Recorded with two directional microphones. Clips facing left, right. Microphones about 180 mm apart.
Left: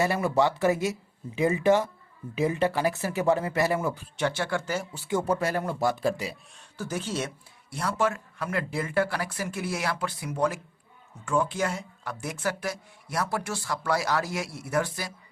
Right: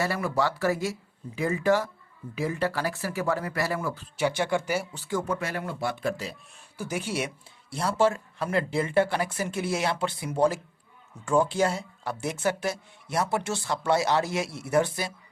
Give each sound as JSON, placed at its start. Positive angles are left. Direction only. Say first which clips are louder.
{"t": 0.0, "sound": "speech", "louder": "left 3 dB", "side_deg": 20}
{"t": 4.2, "sound": "speech", "louder": "right 2 dB", "side_deg": -15}
{"t": 4.9, "sound": "speech", "louder": "left 2 dB", "side_deg": 20}
{"t": 5.2, "sound": "speech", "louder": "left 4 dB", "side_deg": 35}
{"t": 6.7, "sound": "speech", "louder": "right 1 dB", "side_deg": -10}
{"t": 7.7, "sound": "speech", "louder": "right 3 dB", "side_deg": -30}